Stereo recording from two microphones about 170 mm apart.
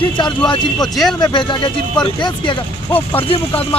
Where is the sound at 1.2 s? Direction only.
25° left (ahead or behind).